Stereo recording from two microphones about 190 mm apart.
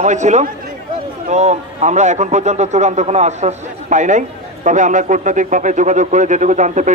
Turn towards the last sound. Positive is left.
turn(degrees=-40)  # may be behind; listen again after turning